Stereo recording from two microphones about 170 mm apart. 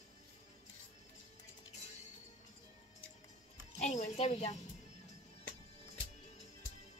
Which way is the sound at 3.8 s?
45° left (ahead or behind).